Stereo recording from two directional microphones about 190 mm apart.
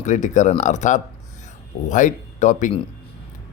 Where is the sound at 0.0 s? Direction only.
40° left (ahead or behind).